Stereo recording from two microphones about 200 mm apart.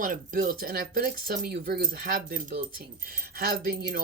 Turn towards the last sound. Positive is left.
turn(degrees=-45)  # may be behind; listen again after turning